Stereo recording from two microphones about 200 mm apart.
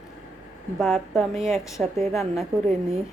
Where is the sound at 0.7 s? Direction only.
Centre (ahead or behind).